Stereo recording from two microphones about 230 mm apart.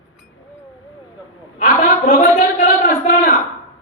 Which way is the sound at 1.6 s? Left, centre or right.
Left.